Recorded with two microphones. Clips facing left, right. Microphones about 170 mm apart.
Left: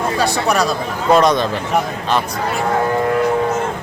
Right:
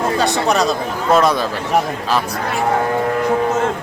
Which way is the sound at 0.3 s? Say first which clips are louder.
Right 1 dB; 20° right (ahead or behind).